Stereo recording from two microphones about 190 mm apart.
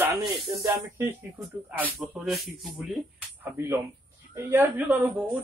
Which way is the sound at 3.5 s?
10° right (ahead or behind).